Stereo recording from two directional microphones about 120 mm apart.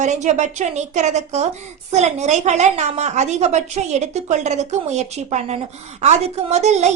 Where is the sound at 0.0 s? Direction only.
80° right.